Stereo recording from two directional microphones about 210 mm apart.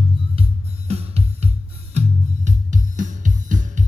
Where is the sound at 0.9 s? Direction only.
30° right (ahead or behind).